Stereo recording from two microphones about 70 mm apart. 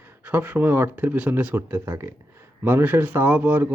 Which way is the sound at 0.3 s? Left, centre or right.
Right.